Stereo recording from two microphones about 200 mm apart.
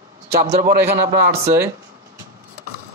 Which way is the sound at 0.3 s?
45° right (ahead or behind).